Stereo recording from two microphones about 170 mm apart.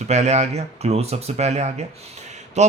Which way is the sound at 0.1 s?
40° right (ahead or behind).